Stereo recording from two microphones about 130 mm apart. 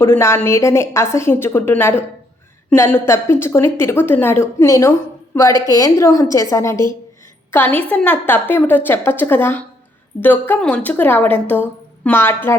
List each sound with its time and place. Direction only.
0.0 s a woman's voice: 20° left (ahead or behind)
7.8 s a woman's voice: 10° left (ahead or behind)